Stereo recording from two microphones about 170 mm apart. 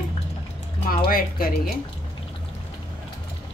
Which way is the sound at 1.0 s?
60° left (ahead or behind).